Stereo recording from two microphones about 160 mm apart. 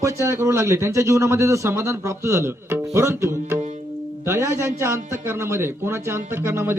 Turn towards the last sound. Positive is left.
turn(degrees=-15)  # may be behind; listen again after turning